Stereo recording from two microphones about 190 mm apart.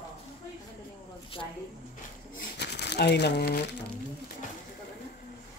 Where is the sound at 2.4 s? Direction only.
60° left (ahead or behind).